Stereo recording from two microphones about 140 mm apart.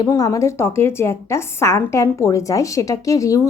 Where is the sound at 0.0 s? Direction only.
25° left (ahead or behind).